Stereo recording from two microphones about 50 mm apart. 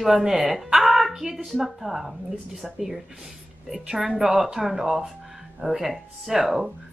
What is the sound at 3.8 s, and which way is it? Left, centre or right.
Speech, centre.